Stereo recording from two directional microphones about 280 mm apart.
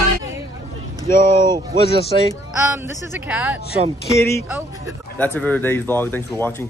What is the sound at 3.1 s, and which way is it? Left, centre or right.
Music, centre.